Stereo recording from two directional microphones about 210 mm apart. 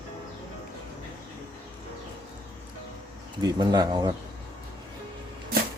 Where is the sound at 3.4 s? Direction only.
20° right (ahead or behind).